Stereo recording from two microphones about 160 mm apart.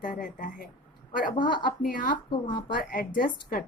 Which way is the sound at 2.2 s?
30° left (ahead or behind).